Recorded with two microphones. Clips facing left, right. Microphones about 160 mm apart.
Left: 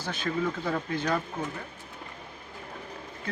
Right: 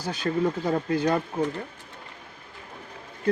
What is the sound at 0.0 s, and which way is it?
Speech, 35° right (ahead or behind).